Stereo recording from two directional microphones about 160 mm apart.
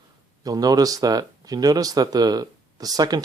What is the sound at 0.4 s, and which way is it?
Speech, 25° right (ahead or behind).